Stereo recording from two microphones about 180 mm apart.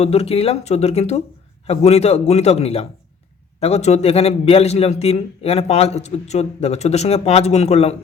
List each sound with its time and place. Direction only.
0.0 s a man's voice: 35° left (ahead or behind)